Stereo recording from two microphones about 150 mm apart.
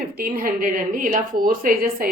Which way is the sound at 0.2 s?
75° right (ahead or behind).